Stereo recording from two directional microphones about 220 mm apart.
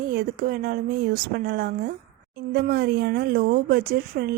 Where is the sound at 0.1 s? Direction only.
40° right (ahead or behind).